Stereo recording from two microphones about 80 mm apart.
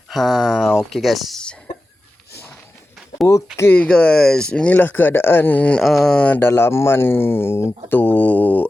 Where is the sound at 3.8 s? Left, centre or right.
Centre.